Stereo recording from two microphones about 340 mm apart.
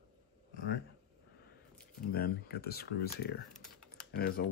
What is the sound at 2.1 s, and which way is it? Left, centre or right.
Speech, left.